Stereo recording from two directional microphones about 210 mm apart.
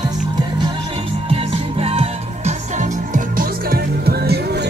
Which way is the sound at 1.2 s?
25° right (ahead or behind).